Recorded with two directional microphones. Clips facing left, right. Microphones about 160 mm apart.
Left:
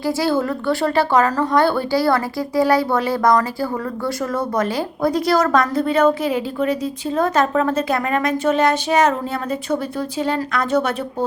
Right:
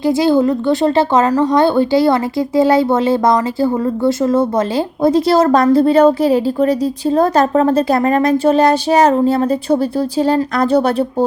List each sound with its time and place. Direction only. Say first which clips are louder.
0.0 s a woman's voice: right 7 dB; 20° right (ahead or behind)